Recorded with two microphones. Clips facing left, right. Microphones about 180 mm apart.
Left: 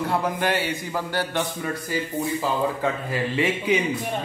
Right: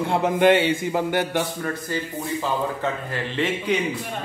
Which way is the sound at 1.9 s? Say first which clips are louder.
Left 1 dB; 10° left (ahead or behind).